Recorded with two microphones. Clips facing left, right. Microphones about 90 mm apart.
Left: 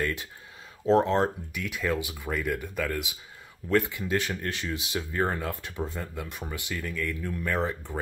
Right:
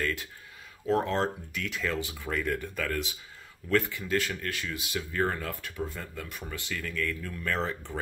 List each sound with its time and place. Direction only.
0.0 s speech: 20° left (ahead or behind)